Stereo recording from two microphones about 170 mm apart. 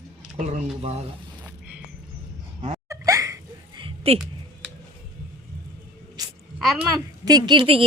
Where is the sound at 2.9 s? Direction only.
20° right (ahead or behind).